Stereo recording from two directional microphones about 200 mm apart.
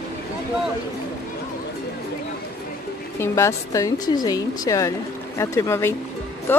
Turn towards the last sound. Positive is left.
turn(degrees=10)  # may be behind; listen again after turning